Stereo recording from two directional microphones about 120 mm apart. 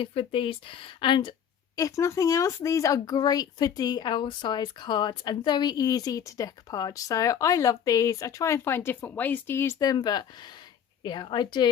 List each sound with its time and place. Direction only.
0.0 s speech: 50° left (ahead or behind)
1.7 s a woman's voice: 25° left (ahead or behind)